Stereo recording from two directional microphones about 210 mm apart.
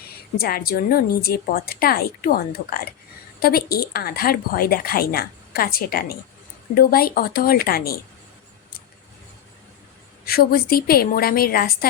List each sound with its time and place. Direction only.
0.3 s a woman's voice: 45° left (ahead or behind)
10.2 s a woman's voice: 45° left (ahead or behind)